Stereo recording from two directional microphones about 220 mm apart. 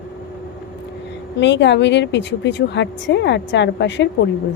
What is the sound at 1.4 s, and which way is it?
Speech, 55° left (ahead or behind).